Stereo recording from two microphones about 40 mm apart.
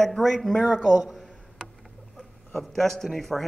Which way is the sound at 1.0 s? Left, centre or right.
Centre.